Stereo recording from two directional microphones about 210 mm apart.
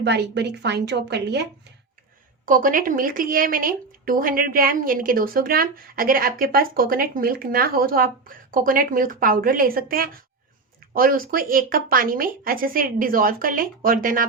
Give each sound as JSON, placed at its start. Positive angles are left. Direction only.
{"t": 0.0, "sound": "a woman's voice", "side_deg": -55}
{"t": 2.5, "sound": "a woman's voice", "side_deg": -40}